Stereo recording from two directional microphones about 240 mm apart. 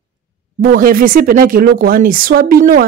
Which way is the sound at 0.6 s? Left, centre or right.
Right.